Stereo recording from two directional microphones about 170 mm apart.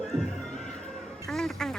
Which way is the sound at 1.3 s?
5° left (ahead or behind).